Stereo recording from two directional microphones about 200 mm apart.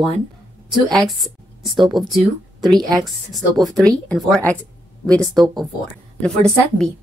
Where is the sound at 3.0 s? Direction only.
Centre (ahead or behind).